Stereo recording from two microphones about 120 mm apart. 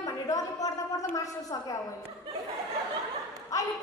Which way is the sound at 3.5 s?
25° left (ahead or behind).